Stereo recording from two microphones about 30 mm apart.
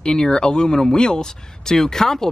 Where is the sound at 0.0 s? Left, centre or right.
Left.